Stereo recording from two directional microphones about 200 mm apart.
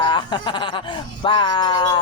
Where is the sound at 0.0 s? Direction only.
20° left (ahead or behind).